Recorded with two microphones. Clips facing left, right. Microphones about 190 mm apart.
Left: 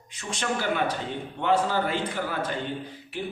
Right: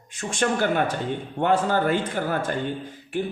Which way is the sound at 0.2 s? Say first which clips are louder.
Right 6 dB; 50° right (ahead or behind).